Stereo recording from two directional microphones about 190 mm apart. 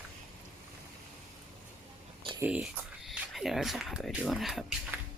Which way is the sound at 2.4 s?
5° right (ahead or behind).